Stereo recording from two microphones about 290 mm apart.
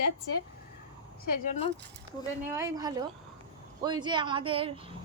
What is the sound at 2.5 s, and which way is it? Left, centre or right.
Speech, centre.